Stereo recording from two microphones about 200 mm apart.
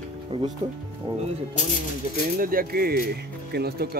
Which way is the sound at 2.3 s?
45° right (ahead or behind).